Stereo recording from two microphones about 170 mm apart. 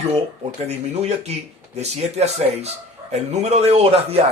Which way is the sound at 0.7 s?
40° right (ahead or behind).